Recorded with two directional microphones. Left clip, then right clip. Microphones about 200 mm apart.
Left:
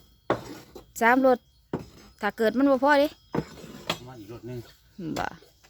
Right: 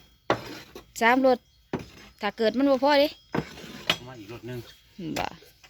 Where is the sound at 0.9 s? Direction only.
5° left (ahead or behind).